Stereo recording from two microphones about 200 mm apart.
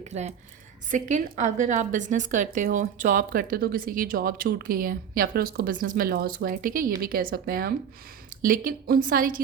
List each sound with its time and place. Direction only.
0.0 s a woman's voice: 35° right (ahead or behind)